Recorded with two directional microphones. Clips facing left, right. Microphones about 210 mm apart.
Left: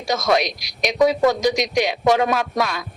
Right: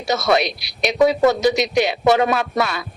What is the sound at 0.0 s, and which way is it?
Speech, 5° right (ahead or behind).